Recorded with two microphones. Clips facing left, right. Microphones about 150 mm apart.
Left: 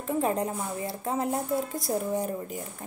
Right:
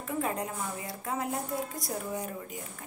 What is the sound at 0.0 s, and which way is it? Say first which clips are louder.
A woman's voice: left 5 dB; 30° left (ahead or behind).